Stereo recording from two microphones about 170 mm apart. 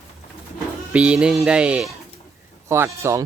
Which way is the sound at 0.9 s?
5° right (ahead or behind).